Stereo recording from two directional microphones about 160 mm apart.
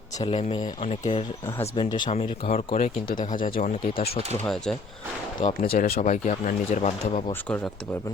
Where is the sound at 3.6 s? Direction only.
40° left (ahead or behind).